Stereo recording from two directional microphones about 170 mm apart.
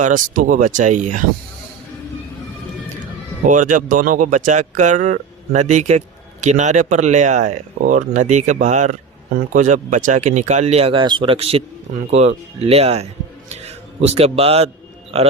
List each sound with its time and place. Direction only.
0.0 s speech: 50° right (ahead or behind)
3.4 s a man's voice: 50° right (ahead or behind)